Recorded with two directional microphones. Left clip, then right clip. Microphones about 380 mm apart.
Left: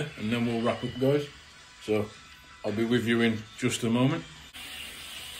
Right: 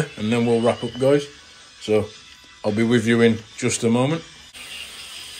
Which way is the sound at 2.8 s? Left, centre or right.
Centre.